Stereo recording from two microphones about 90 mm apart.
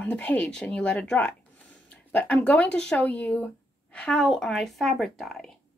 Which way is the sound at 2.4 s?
15° left (ahead or behind).